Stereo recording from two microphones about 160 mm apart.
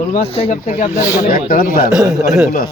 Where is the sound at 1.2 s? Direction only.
60° left (ahead or behind).